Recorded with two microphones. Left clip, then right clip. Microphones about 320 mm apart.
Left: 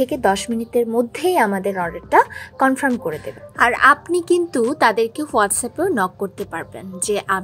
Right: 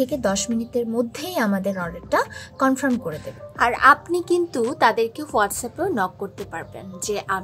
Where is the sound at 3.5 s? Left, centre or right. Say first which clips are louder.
Left 2 dB; centre.